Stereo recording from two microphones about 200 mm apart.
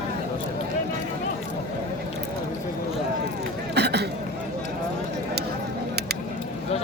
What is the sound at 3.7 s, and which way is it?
Chatter, 55° right (ahead or behind).